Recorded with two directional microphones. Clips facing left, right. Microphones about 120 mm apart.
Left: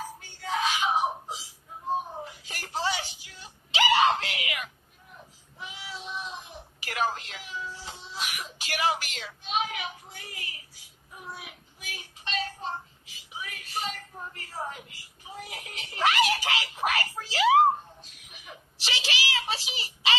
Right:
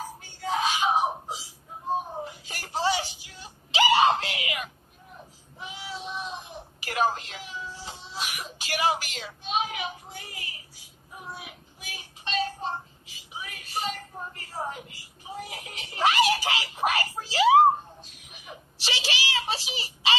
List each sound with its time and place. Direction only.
0.4 s screaming: 30° right (ahead or behind)
2.4 s screaming: 30° right (ahead or behind)
5.6 s child singing: 30° right (ahead or behind)
6.8 s music: 30° right (ahead or behind)
11.3 s child singing: 30° right (ahead or behind)
13.4 s music: 30° right (ahead or behind)
18.4 s a sound: 30° right (ahead or behind)